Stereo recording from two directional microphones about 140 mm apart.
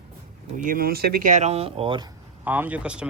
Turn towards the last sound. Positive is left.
turn(degrees=-5)  # may be behind; listen again after turning